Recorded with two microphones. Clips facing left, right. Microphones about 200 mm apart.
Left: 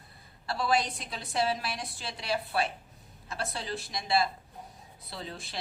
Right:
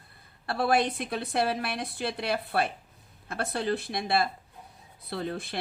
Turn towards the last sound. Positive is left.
turn(degrees=-60)  # may be behind; listen again after turning